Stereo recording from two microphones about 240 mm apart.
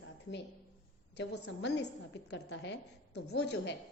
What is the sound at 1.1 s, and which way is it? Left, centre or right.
A woman's voice, left.